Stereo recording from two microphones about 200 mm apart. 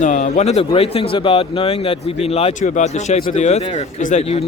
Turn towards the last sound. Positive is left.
turn(degrees=30)  # may be behind; listen again after turning